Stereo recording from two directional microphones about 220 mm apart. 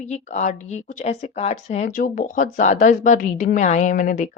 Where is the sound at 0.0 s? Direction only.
30° left (ahead or behind).